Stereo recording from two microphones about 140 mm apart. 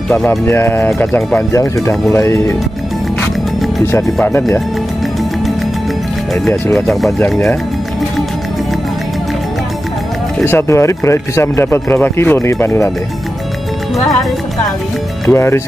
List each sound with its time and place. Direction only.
0.1 s speech: 15° left (ahead or behind)
3.8 s speech: 15° left (ahead or behind)
6.7 s speech: centre (ahead or behind)
10.4 s speech: 20° left (ahead or behind)
15.2 s speech: 20° left (ahead or behind)